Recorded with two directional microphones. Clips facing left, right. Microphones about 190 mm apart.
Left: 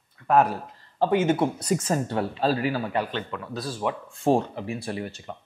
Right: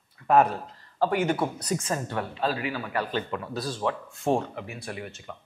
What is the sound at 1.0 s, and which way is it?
Speech, 20° left (ahead or behind).